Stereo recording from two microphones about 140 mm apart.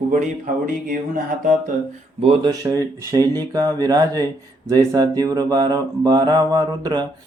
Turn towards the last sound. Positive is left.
turn(degrees=-30)  # may be behind; listen again after turning